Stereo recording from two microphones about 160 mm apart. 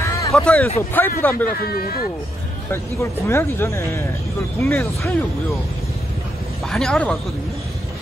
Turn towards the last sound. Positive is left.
turn(degrees=5)  # may be behind; listen again after turning